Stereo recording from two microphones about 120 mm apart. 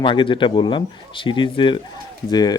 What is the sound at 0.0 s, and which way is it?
Speech, 45° left (ahead or behind).